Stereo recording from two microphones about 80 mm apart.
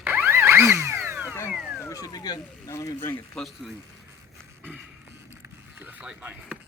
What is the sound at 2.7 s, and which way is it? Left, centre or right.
Speech, left.